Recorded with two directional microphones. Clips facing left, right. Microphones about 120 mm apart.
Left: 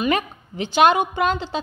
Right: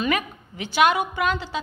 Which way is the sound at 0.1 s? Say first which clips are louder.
Left 3 dB; 25° left (ahead or behind).